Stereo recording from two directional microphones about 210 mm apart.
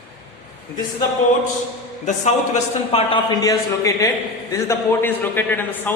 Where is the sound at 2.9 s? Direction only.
20° left (ahead or behind).